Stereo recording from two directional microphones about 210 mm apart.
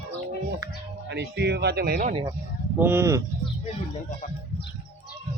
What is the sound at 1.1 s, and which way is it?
Speech, 55° right (ahead or behind).